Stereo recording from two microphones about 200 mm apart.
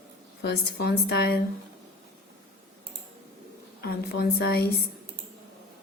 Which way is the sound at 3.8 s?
55° left (ahead or behind).